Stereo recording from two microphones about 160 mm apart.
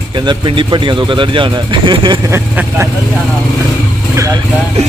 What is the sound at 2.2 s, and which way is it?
Speech, 15° right (ahead or behind).